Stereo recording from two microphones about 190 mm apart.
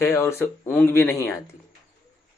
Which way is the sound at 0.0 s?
15° left (ahead or behind).